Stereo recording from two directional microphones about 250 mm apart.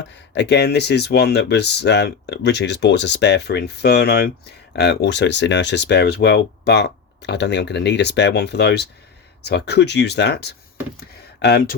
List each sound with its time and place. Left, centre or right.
0.1 s speech: left